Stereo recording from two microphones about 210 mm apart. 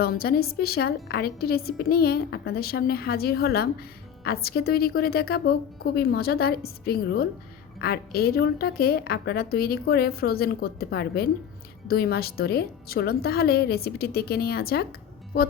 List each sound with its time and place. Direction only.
0.0 s a woman's voice: 45° left (ahead or behind)